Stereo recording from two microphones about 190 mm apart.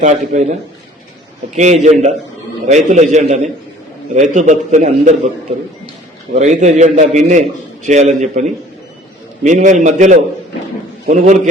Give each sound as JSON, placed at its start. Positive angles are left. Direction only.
{"t": 0.0, "sound": "a man's voice", "side_deg": -40}
{"t": 1.5, "sound": "a man's voice", "side_deg": -40}
{"t": 6.4, "sound": "a man's voice", "side_deg": -40}